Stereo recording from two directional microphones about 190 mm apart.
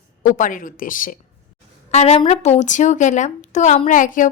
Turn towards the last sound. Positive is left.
turn(degrees=45)  # may be behind; listen again after turning